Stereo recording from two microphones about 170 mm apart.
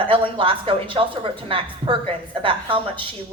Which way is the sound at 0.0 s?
30° right (ahead or behind).